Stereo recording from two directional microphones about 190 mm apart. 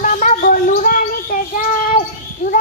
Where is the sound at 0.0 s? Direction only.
45° left (ahead or behind).